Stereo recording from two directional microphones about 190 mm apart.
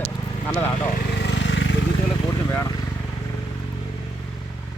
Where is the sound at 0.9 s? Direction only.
55° left (ahead or behind); by 1.7 s 75° left (ahead or behind).